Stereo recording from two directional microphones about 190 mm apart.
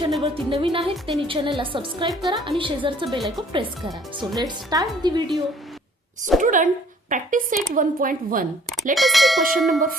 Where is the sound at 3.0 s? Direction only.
Centre (ahead or behind).